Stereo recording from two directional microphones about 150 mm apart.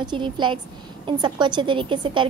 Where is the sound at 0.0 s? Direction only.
30° right (ahead or behind).